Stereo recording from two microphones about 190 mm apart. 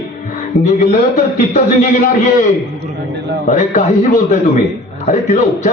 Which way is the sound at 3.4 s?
40° left (ahead or behind).